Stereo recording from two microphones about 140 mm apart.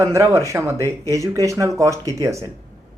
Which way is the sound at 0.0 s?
20° right (ahead or behind).